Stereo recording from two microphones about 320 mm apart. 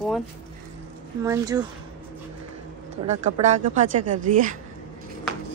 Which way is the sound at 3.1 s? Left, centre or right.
Right.